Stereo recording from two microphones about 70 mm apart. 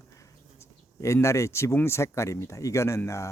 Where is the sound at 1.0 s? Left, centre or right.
Left.